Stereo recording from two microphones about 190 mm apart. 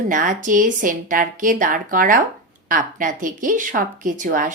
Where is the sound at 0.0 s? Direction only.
45° right (ahead or behind).